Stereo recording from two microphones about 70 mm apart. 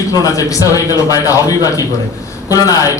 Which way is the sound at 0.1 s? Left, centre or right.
Left.